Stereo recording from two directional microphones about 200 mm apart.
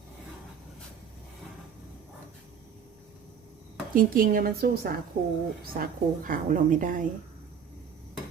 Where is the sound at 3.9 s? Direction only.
45° right (ahead or behind).